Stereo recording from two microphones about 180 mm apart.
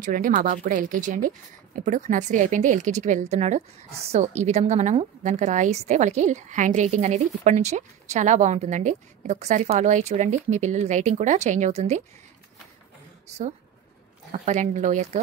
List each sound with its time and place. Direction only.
0.0 s a woman's voice: 50° right (ahead or behind)
14.3 s a woman's voice: 40° right (ahead or behind)